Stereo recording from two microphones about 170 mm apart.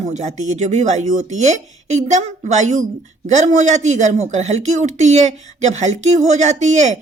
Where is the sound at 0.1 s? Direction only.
45° right (ahead or behind).